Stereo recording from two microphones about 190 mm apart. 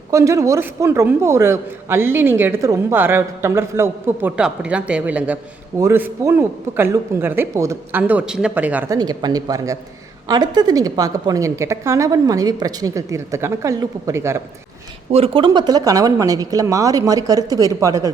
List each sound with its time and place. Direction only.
0.1 s a man's voice: 15° right (ahead or behind)
15.1 s speech: 30° right (ahead or behind)